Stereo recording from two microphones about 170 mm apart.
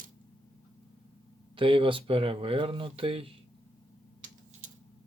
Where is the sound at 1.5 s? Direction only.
30° right (ahead or behind).